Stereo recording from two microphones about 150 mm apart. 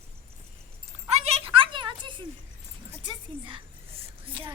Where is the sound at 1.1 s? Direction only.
40° right (ahead or behind).